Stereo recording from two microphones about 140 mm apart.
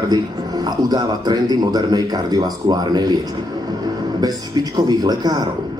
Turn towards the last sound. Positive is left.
turn(degrees=-25)  # may be behind; listen again after turning